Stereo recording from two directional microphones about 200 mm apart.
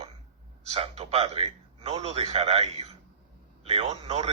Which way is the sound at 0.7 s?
30° right (ahead or behind).